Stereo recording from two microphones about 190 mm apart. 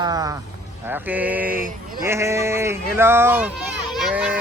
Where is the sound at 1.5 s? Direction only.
50° right (ahead or behind).